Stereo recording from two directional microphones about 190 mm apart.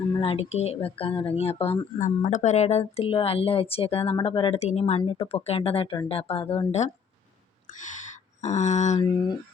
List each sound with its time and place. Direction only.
0.2 s speech: 30° left (ahead or behind)